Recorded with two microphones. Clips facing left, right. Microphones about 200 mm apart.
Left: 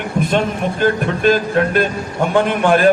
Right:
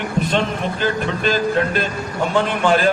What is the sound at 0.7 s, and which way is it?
A man's voice, 55° left (ahead or behind).